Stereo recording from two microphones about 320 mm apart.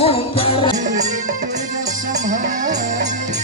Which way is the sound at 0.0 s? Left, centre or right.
Centre.